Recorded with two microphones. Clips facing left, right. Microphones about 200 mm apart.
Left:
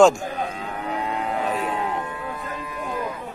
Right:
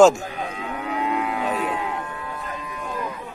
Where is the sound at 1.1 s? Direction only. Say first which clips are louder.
Right 1 dB; 35° left (ahead or behind).